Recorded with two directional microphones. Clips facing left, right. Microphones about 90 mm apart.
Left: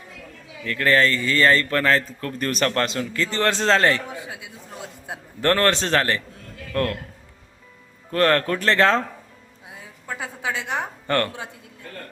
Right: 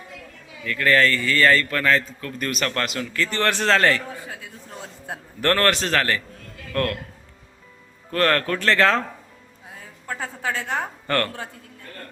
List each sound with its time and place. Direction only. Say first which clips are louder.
0.6 s a man's voice: even; 35° left (ahead or behind); by 5.2 s 5° left (ahead or behind)
5.4 s a man's voice: left 1 dB; 20° left (ahead or behind)
8.1 s a man's voice: left 2 dB; 25° left (ahead or behind)
9.6 s a woman's voice: right 1 dB; 15° left (ahead or behind)